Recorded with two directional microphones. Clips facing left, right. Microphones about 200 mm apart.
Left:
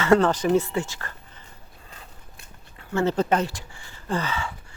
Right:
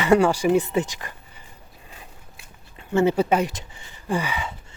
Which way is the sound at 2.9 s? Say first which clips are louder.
Right 3 dB; 15° right (ahead or behind).